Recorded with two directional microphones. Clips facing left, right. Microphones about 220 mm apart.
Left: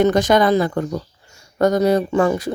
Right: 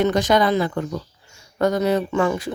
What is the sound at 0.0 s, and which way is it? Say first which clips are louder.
Speech: left 3 dB; 50° left (ahead or behind).